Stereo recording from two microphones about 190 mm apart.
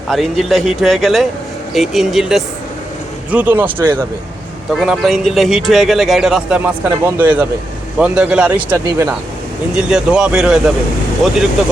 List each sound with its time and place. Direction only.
0.1 s speech: centre (ahead or behind)